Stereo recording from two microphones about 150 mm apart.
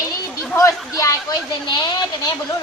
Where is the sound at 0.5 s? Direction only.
20° left (ahead or behind).